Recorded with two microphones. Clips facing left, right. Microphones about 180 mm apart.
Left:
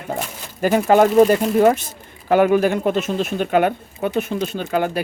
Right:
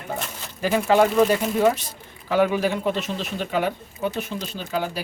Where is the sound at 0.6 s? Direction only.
50° left (ahead or behind).